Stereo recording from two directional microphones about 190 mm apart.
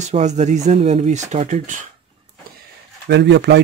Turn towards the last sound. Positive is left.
turn(degrees=-65)  # may be behind; listen again after turning